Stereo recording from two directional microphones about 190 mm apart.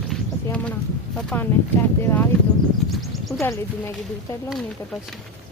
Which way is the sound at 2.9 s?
Centre (ahead or behind).